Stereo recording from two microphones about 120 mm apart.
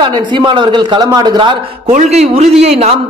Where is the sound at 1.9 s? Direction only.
70° right (ahead or behind).